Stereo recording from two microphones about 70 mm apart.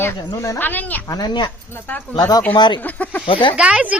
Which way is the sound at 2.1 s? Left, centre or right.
Left.